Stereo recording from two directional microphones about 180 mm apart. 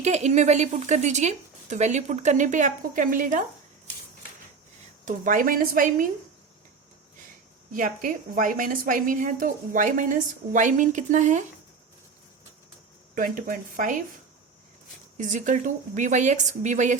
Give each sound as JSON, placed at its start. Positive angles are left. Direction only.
{"t": 0.0, "sound": "speech", "side_deg": -40}
{"t": 5.0, "sound": "a woman's voice", "side_deg": -50}
{"t": 7.7, "sound": "a woman's voice", "side_deg": -50}
{"t": 13.1, "sound": "a woman's voice", "side_deg": -50}
{"t": 15.2, "sound": "a woman's voice", "side_deg": -45}